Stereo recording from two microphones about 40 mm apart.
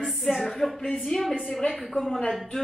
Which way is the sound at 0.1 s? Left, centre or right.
Centre.